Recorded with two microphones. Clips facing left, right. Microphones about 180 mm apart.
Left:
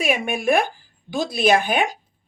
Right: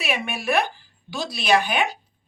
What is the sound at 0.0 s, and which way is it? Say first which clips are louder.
Speech: left 5 dB; 45° left (ahead or behind).